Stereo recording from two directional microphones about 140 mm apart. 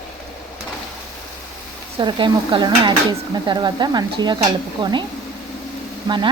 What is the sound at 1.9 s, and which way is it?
Speech, 35° right (ahead or behind).